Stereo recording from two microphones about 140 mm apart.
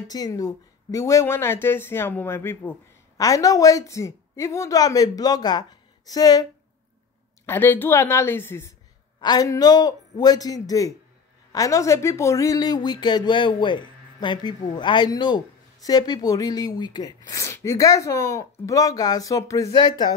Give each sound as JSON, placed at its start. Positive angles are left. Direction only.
{"t": 0.1, "sound": "speech", "side_deg": 25}
{"t": 7.4, "sound": "speech", "side_deg": 15}
{"t": 9.2, "sound": "speech", "side_deg": 30}